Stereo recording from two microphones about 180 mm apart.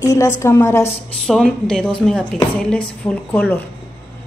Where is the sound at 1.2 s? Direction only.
5° left (ahead or behind).